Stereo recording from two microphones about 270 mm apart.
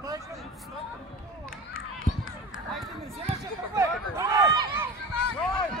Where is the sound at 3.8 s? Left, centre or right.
Centre.